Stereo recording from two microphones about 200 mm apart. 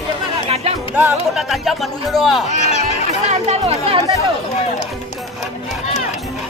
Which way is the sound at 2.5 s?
35° left (ahead or behind).